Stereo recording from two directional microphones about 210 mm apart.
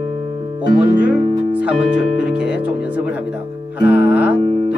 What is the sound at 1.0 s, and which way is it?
Speech, 5° right (ahead or behind).